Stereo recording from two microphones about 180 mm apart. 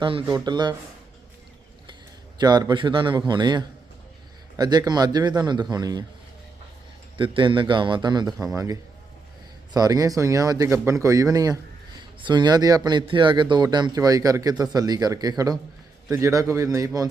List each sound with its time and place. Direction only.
0.0 s a man's voice: 30° right (ahead or behind)
2.4 s a man's voice: 20° right (ahead or behind)
7.2 s a man's voice: 25° right (ahead or behind)